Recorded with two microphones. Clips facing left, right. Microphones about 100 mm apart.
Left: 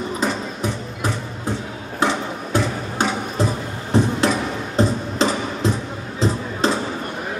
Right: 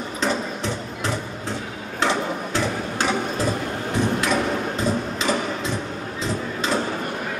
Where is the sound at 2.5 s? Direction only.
20° left (ahead or behind).